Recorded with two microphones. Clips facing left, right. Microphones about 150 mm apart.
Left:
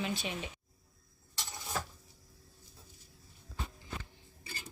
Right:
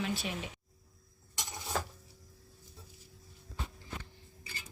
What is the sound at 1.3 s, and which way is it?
Vehicle, 15° right (ahead or behind).